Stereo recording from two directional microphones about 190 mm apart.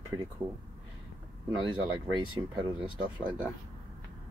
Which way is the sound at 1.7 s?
25° right (ahead or behind).